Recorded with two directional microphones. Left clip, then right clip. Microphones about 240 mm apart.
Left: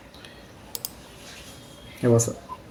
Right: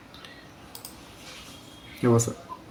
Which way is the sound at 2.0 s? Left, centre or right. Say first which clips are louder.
Left 2 dB; centre.